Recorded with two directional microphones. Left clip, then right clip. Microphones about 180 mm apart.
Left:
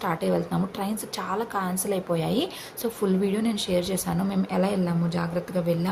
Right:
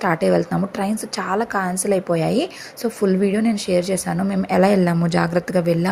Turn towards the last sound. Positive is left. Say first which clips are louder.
# right 7 dB
turn(degrees=-35)  # may be behind; listen again after turning